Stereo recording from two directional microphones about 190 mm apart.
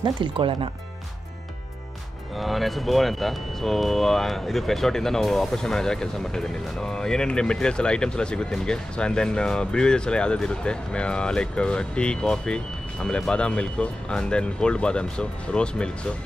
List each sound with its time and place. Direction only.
0.0 s speech: 25° right (ahead or behind)
2.3 s speech: centre (ahead or behind)